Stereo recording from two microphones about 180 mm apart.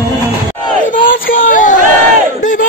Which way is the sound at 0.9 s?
50° left (ahead or behind).